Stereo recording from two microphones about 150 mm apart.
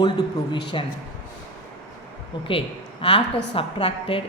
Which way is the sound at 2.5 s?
35° left (ahead or behind).